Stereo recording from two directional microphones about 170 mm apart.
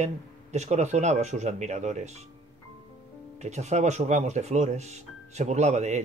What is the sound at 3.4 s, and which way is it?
Speech, 40° right (ahead or behind).